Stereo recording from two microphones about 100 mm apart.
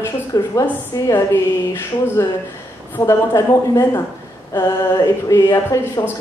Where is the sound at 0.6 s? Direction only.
35° left (ahead or behind).